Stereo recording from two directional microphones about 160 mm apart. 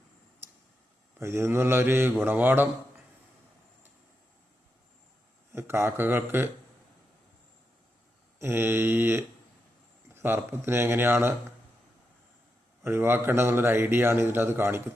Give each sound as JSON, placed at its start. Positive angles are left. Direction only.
{"t": 1.2, "sound": "speech", "side_deg": -15}
{"t": 5.5, "sound": "speech", "side_deg": -15}
{"t": 8.4, "sound": "speech", "side_deg": -15}
{"t": 12.8, "sound": "speech", "side_deg": -15}